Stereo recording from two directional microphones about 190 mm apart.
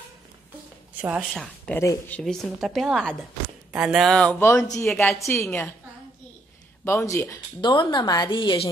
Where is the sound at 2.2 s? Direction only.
Centre (ahead or behind).